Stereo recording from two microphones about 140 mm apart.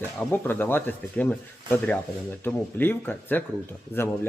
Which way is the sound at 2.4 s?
15° left (ahead or behind).